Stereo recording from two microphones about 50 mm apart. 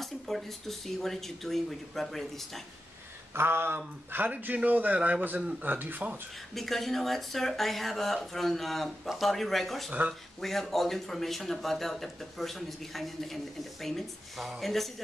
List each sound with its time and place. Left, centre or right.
0.0 s speech: centre
3.3 s a sound: right
3.7 s speech: right
6.5 s speech: centre